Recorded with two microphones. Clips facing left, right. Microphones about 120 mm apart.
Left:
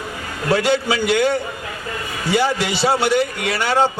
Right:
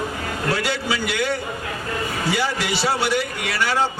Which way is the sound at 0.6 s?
25° left (ahead or behind).